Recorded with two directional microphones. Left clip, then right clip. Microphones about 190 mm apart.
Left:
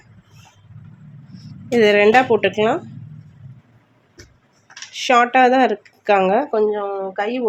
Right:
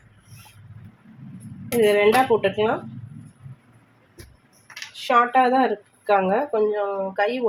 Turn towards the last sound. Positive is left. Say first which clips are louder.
# left 1 dB
turn(degrees=40)  # may be behind; listen again after turning